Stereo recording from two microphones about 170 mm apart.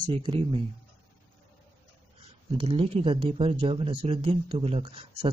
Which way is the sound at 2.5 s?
35° right (ahead or behind).